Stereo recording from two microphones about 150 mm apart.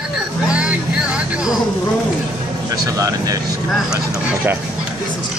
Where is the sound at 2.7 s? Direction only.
25° right (ahead or behind).